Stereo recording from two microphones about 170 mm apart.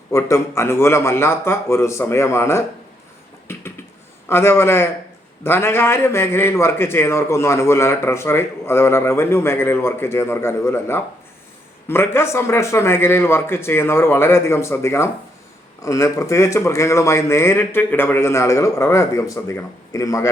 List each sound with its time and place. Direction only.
0.1 s a man's voice: 15° left (ahead or behind)
3.4 s a sound: 15° left (ahead or behind)
4.3 s a man's voice: 15° left (ahead or behind)